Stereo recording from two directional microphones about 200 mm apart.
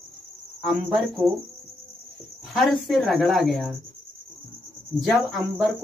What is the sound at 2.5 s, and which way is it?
Speech, centre (ahead or behind).